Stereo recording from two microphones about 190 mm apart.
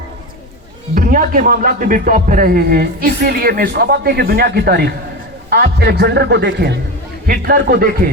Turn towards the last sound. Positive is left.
turn(degrees=-50)  # may be behind; listen again after turning